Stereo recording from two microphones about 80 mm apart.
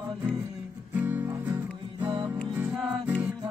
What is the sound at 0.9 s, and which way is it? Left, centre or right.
Music, right.